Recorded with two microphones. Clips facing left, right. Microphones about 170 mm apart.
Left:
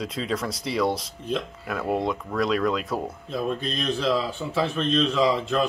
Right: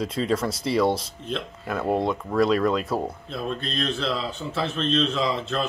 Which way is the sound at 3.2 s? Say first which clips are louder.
Left 3 dB; 10° left (ahead or behind).